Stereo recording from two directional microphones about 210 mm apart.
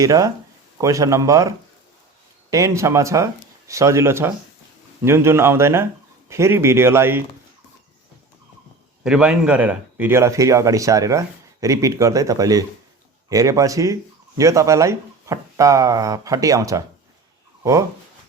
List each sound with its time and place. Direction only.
0.0 s a man's voice: 15° right (ahead or behind)
9.0 s a man's voice: 5° right (ahead or behind)